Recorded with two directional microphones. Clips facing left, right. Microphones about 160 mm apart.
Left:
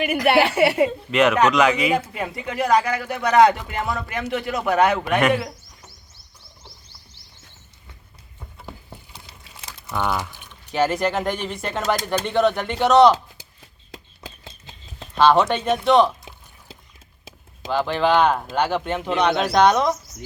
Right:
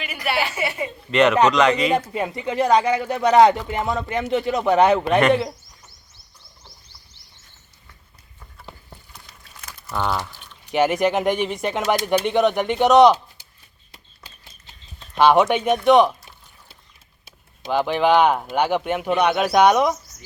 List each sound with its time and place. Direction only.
0.2 s speech: 60° left (ahead or behind)
1.1 s speech: centre (ahead or behind)
2.1 s speech: 25° right (ahead or behind)
9.1 s crumpling: 30° left (ahead or behind)
10.1 s pour: 10° left (ahead or behind)
10.7 s speech: 15° right (ahead or behind)
15.1 s speech: 15° right (ahead or behind)
17.7 s speech: 15° right (ahead or behind)